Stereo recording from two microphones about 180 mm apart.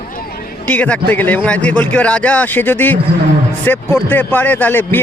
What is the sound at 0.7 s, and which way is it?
A man's voice, 5° left (ahead or behind).